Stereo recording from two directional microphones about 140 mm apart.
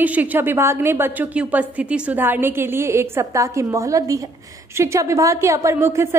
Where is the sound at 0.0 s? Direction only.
10° right (ahead or behind).